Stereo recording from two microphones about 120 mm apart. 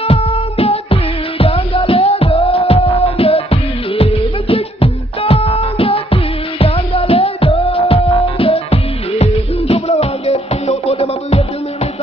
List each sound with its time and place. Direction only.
0.1 s music: 55° left (ahead or behind)